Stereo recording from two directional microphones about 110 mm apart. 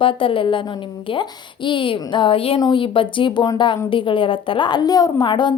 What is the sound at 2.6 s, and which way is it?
A woman's voice, 45° left (ahead or behind).